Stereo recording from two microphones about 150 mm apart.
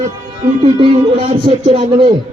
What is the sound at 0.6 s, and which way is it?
Speech, 35° right (ahead or behind).